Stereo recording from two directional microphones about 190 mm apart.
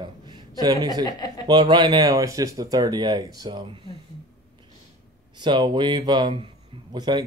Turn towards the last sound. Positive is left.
turn(degrees=-20)  # may be behind; listen again after turning